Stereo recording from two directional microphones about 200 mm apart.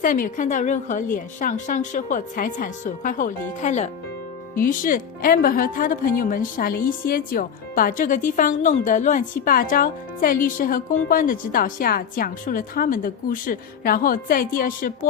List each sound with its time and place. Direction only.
0.0 s a woman's voice: 40° left (ahead or behind)